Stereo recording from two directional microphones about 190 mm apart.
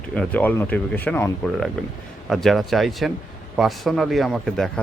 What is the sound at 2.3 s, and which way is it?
Speech, centre (ahead or behind).